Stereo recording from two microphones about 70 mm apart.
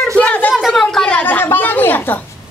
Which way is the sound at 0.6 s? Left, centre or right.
Centre.